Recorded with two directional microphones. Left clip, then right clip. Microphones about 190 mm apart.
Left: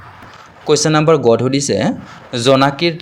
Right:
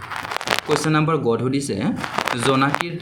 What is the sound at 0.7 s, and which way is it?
Speech, 40° left (ahead or behind).